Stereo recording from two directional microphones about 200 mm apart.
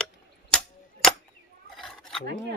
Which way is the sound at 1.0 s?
Centre (ahead or behind).